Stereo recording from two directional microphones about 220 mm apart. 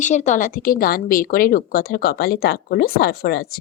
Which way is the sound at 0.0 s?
35° left (ahead or behind).